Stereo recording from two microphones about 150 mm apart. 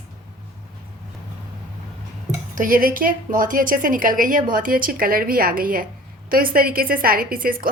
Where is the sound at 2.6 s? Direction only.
70° right (ahead or behind).